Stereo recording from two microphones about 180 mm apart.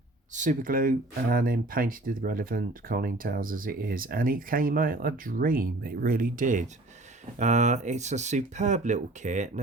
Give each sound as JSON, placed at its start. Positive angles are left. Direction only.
{"t": 0.3, "sound": "speech", "side_deg": -45}